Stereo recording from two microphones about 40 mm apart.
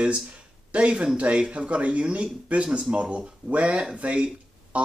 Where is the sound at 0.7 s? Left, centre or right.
Right.